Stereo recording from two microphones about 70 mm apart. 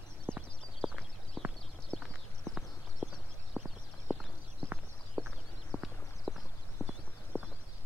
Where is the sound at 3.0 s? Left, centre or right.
Centre.